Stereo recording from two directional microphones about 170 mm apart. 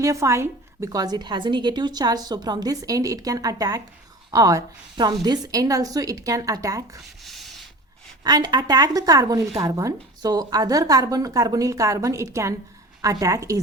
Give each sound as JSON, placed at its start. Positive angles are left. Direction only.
{"t": 0.0, "sound": "speech", "side_deg": -20}
{"t": 8.2, "sound": "speech", "side_deg": -25}